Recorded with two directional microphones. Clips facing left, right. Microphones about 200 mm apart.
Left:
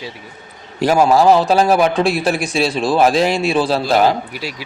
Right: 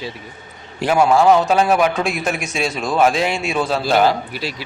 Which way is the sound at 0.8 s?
40° left (ahead or behind).